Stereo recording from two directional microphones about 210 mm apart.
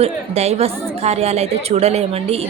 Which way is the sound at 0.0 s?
30° right (ahead or behind).